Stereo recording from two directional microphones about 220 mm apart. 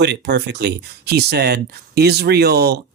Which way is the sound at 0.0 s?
50° right (ahead or behind).